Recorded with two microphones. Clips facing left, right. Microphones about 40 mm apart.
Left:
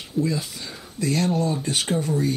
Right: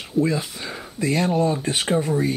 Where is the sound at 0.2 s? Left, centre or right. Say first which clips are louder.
Right 3 dB; right.